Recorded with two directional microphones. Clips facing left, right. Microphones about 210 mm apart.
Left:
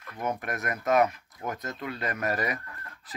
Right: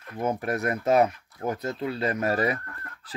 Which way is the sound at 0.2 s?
30° right (ahead or behind).